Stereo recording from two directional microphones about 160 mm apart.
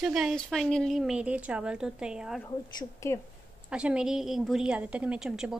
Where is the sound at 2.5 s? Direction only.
20° left (ahead or behind).